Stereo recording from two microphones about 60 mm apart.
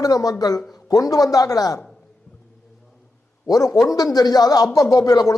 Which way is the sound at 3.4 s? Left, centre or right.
Left.